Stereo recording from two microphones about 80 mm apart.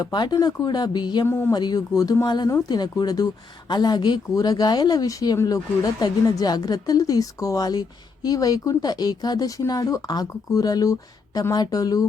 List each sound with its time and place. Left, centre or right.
0.0 s speech: left
1.2 s speech: left
1.5 s speech: left